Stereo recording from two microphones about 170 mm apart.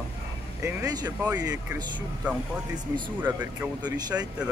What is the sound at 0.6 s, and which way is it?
Speech, 20° right (ahead or behind).